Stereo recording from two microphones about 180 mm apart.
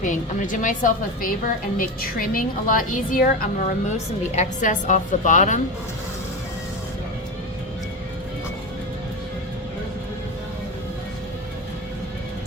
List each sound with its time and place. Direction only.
0.0 s a woman's voice: 45° left (ahead or behind)